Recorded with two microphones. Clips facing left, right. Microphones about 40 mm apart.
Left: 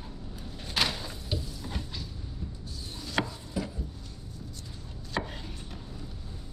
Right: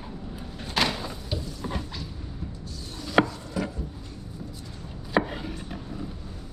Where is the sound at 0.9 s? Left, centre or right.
Centre.